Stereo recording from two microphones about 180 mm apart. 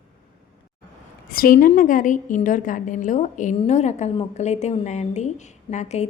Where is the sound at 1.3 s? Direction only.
55° left (ahead or behind).